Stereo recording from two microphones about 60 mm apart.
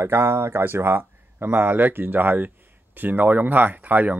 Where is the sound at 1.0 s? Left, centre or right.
Right.